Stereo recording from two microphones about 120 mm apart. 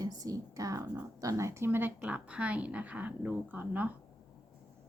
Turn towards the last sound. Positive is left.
turn(degrees=-15)  # may be behind; listen again after turning